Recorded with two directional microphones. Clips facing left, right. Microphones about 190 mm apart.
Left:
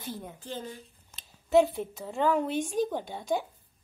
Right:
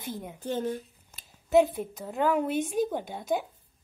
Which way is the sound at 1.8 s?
5° right (ahead or behind).